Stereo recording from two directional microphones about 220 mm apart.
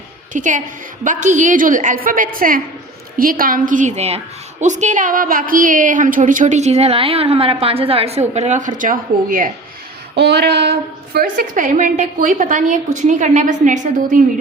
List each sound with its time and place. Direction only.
0.3 s a woman's voice: 35° right (ahead or behind)
10.2 s a woman's voice: 50° right (ahead or behind)